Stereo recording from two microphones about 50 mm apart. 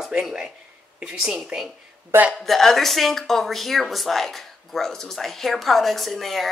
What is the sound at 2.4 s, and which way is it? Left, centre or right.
Speech, centre.